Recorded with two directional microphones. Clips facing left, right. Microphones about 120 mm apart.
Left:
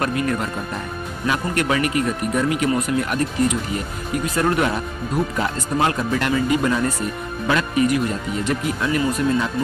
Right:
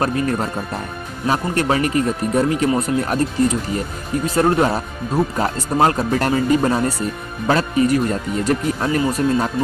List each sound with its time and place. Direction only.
0.0 s speech: 35° right (ahead or behind)